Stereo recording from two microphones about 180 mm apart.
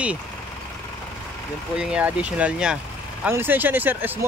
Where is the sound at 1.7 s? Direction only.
5° right (ahead or behind).